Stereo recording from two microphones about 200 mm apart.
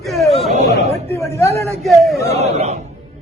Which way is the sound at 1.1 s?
15° left (ahead or behind).